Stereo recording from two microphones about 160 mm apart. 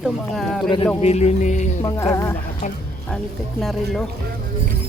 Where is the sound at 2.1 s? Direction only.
15° left (ahead or behind).